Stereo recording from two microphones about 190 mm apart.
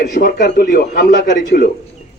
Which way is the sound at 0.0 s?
55° left (ahead or behind).